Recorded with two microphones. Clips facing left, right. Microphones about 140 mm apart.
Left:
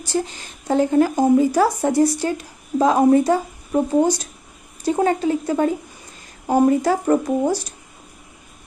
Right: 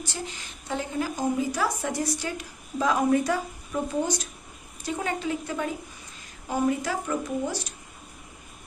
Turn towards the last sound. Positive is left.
turn(degrees=50)  # may be behind; listen again after turning